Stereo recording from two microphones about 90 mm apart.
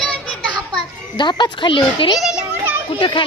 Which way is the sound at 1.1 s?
60° left (ahead or behind).